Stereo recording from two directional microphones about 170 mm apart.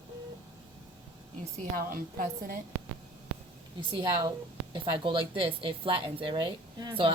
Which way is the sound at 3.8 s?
30° right (ahead or behind).